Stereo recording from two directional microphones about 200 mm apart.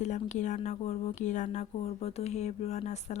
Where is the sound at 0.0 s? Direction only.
35° left (ahead or behind).